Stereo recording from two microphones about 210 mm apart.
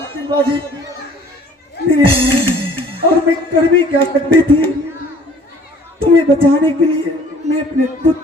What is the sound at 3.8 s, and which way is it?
Speech, 25° right (ahead or behind).